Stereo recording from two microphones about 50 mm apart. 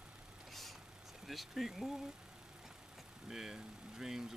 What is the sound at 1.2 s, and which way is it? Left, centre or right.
Speech, centre.